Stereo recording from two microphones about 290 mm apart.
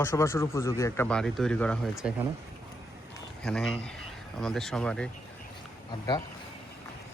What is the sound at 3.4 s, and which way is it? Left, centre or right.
Speech, centre.